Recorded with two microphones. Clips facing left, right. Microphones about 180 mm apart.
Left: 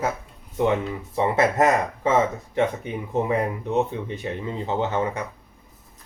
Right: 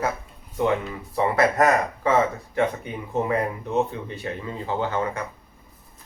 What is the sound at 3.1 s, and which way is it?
Speech, 15° left (ahead or behind).